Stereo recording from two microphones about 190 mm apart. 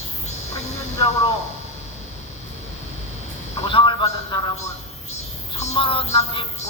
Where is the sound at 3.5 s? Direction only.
30° left (ahead or behind).